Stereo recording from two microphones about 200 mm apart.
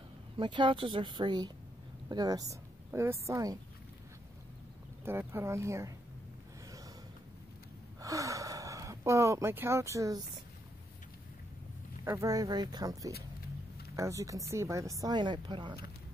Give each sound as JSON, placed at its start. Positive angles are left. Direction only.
{"t": 0.4, "sound": "a woman's voice", "side_deg": -25}
{"t": 5.0, "sound": "speech", "side_deg": -10}
{"t": 8.0, "sound": "speech", "side_deg": -15}
{"t": 12.0, "sound": "speech", "side_deg": -15}